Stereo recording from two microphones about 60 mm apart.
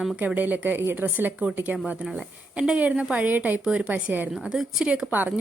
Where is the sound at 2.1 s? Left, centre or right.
Centre.